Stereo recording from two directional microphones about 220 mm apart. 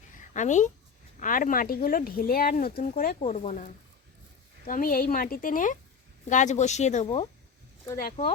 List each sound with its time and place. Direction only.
0.2 s speech: 35° left (ahead or behind)